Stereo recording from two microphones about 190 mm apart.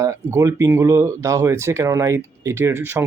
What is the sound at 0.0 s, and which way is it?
Speech, 15° right (ahead or behind).